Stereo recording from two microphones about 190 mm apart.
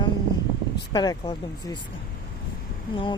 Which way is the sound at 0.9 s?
20° left (ahead or behind).